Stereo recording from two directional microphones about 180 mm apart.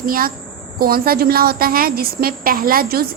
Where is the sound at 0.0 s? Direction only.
55° right (ahead or behind).